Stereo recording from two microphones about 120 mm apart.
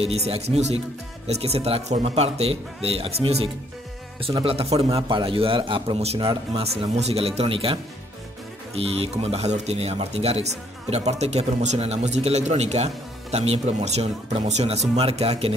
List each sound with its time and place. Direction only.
0.0 s a man's voice: 55° right (ahead or behind)